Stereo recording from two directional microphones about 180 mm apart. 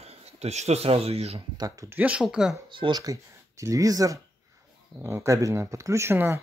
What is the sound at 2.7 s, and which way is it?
Speech, 25° right (ahead or behind).